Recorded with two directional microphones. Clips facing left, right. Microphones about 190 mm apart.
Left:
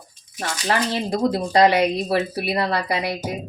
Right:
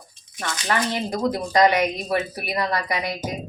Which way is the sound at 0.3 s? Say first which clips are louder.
Left 2 dB; 30° left (ahead or behind).